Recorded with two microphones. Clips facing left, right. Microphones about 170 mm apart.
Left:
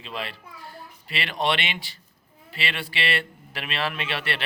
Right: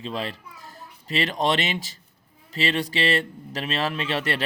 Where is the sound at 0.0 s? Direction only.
35° right (ahead or behind).